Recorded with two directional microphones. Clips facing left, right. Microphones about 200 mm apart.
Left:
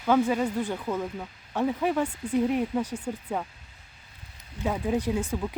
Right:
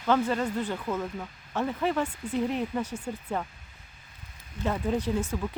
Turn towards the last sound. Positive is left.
turn(degrees=15)  # may be behind; listen again after turning